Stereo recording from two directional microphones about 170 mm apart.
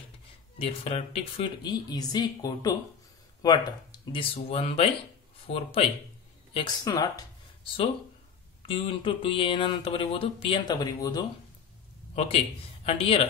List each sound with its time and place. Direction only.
0.6 s a woman's voice: 35° left (ahead or behind)
12.2 s speech: 35° left (ahead or behind)